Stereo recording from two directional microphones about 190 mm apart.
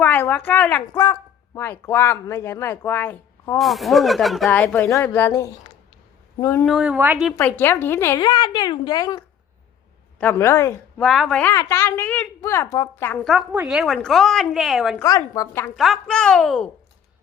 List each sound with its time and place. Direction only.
0.0 s a woman's voice: 10° left (ahead or behind)
3.6 s a woman's voice: centre (ahead or behind)
6.7 s a woman's voice: 5° right (ahead or behind)
7.3 s a woman's voice: 10° left (ahead or behind)
11.0 s a woman's voice: centre (ahead or behind)
11.5 s a woman's voice: 15° left (ahead or behind)
14.9 s a woman's voice: 20° left (ahead or behind)
15.7 s a woman's voice: centre (ahead or behind)